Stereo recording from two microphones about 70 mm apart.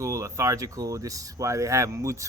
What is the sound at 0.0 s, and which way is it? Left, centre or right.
Speech, right.